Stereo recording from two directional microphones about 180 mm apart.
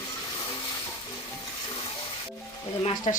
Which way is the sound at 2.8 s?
35° left (ahead or behind).